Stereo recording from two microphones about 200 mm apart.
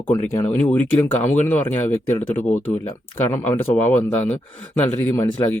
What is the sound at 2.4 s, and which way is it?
Speech, 40° left (ahead or behind).